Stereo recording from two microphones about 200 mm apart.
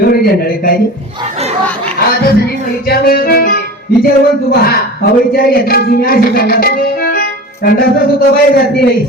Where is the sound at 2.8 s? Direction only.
50° left (ahead or behind).